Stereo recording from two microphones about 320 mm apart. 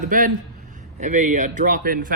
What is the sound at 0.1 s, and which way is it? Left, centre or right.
Speech, right.